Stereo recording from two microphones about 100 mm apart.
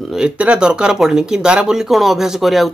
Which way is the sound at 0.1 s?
10° right (ahead or behind).